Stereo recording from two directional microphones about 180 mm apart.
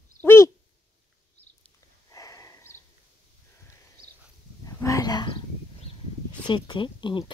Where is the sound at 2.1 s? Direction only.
20° left (ahead or behind).